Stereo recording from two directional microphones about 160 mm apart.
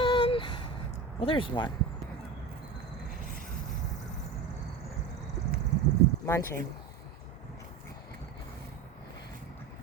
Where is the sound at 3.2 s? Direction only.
60° right (ahead or behind).